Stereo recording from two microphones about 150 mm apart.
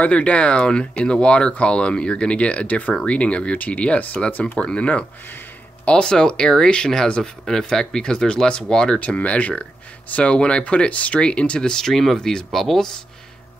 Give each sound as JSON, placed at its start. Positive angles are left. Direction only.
{"t": 0.0, "sound": "speech", "side_deg": 10}